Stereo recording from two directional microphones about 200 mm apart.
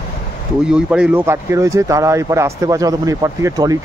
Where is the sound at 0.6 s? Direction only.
5° right (ahead or behind).